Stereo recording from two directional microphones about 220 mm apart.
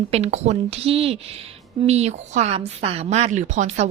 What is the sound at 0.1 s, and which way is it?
Speech, 30° right (ahead or behind).